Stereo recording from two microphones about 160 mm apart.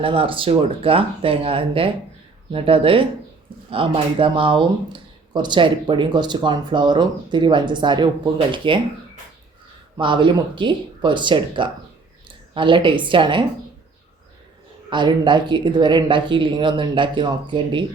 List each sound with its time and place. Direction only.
0.0 s speech: 35° right (ahead or behind)
10.0 s speech: 30° right (ahead or behind)
14.8 s speech: 30° right (ahead or behind)